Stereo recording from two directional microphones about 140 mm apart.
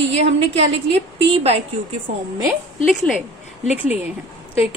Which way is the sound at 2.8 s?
Centre (ahead or behind).